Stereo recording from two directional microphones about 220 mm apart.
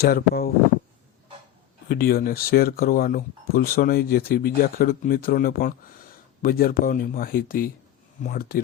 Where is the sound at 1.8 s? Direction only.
45° left (ahead or behind).